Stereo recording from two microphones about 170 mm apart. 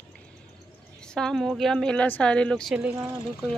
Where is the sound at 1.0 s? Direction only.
5° left (ahead or behind).